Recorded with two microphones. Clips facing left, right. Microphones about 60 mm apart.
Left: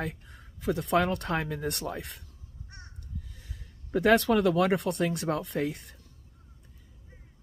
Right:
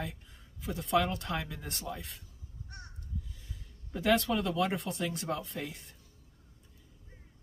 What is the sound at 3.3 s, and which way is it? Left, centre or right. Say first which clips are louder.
Speech: left 2 dB; left.